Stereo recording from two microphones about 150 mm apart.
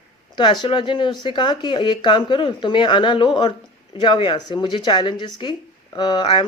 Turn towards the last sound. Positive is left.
turn(degrees=30)  # may be behind; listen again after turning